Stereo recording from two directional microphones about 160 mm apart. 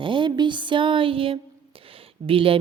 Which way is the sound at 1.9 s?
35° right (ahead or behind).